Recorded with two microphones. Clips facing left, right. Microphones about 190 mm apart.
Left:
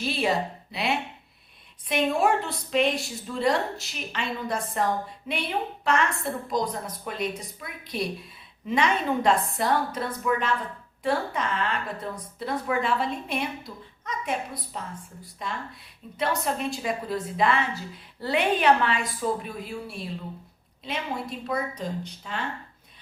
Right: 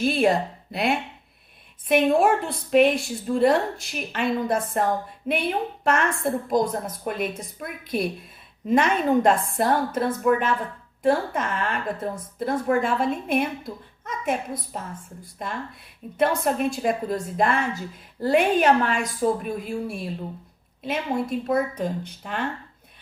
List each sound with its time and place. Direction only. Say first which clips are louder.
0.0 s a woman's voice: right 5 dB; 50° right (ahead or behind)